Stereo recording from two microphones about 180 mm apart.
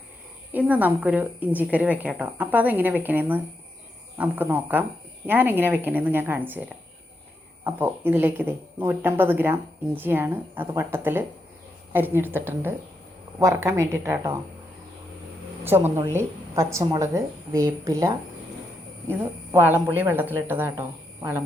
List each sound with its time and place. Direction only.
0.5 s speech: 10° right (ahead or behind)
15.6 s a woman's voice: 10° right (ahead or behind)
19.5 s speech: 10° right (ahead or behind)